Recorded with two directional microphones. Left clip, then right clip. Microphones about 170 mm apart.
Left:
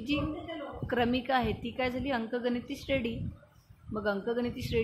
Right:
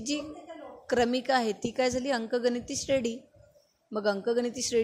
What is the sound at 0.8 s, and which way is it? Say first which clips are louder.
A woman's voice: right 4 dB; 40° right (ahead or behind).